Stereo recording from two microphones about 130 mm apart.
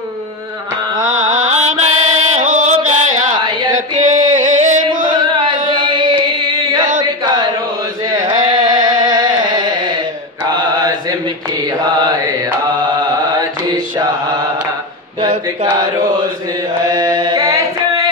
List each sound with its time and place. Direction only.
1.0 s music: 75° right (ahead or behind)
3.3 s a sound: 35° right (ahead or behind)
4.0 s music: 75° right (ahead or behind)
5.0 s carnatic music: 35° right (ahead or behind)
5.8 s music: 35° right (ahead or behind)
7.0 s a sound: 35° right (ahead or behind)
8.0 s carnatic music: 30° right (ahead or behind)
9.0 s music: 30° right (ahead or behind)
10.5 s mantra: 30° right (ahead or behind)
13.4 s mantra: 30° right (ahead or behind)
15.1 s a sound: 35° right (ahead or behind)
16.9 s a sound: 30° right (ahead or behind)